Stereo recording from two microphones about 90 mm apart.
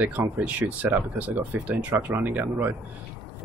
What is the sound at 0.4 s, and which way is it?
Speech, 15° right (ahead or behind).